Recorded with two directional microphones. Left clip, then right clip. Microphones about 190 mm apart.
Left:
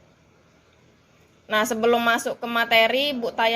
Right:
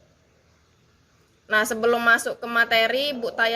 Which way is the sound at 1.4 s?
35° right (ahead or behind).